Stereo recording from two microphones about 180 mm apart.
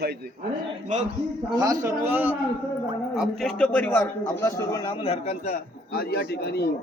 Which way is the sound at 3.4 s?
5° left (ahead or behind).